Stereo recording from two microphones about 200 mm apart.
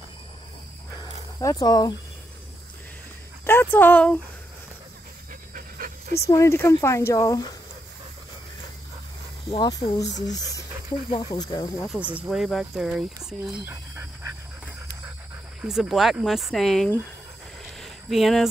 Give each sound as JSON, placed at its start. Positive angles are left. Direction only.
{"t": 1.4, "sound": "speech", "side_deg": 20}
{"t": 3.4, "sound": "speech", "side_deg": 10}
{"t": 5.5, "sound": "pant", "side_deg": -45}
{"t": 6.2, "sound": "speech", "side_deg": 15}
{"t": 9.5, "sound": "speech", "side_deg": 20}
{"t": 9.9, "sound": "speech", "side_deg": 60}
{"t": 10.2, "sound": "speech", "side_deg": 20}
{"t": 11.9, "sound": "speech", "side_deg": -5}
{"t": 15.6, "sound": "speech", "side_deg": 0}
{"t": 17.7, "sound": "a sound", "side_deg": 0}